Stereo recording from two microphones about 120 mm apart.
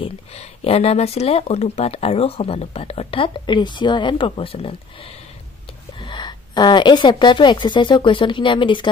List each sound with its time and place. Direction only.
0.0 s speech: 55° left (ahead or behind)
5.9 s speech: 40° left (ahead or behind)